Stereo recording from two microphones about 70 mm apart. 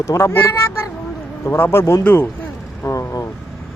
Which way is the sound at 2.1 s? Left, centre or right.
Left.